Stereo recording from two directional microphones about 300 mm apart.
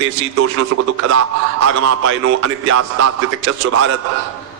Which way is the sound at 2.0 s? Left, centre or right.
Right.